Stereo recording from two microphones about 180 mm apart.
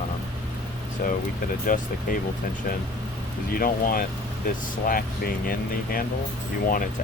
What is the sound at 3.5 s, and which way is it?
Speech, 55° left (ahead or behind).